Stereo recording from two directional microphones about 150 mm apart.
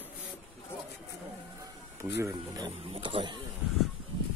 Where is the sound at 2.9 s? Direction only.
35° right (ahead or behind).